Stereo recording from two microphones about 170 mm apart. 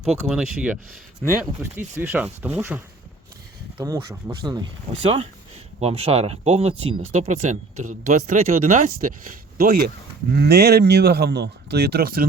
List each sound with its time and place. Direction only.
0.0 s speech: 5° right (ahead or behind); by 9.1 s 50° right (ahead or behind)
10.3 s speech: 75° right (ahead or behind)